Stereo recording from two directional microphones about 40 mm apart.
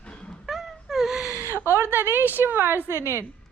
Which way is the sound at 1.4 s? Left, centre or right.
Left.